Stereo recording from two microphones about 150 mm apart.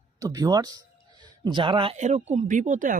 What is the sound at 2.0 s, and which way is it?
Speech, 50° right (ahead or behind).